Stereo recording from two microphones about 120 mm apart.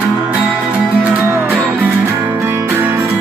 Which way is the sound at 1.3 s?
20° right (ahead or behind).